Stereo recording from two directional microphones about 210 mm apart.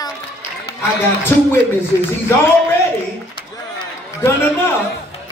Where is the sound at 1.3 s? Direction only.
10° left (ahead or behind).